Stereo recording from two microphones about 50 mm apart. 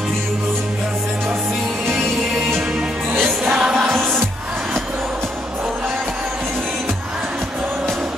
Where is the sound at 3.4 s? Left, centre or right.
Centre.